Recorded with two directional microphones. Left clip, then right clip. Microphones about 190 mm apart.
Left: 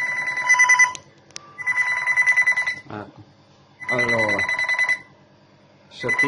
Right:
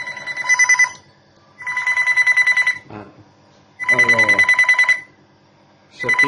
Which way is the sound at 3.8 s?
Centre (ahead or behind).